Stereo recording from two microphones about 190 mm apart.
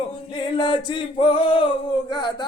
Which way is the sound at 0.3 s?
25° left (ahead or behind).